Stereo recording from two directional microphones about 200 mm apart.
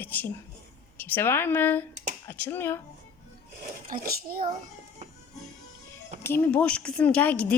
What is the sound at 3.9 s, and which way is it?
Speech, 45° right (ahead or behind).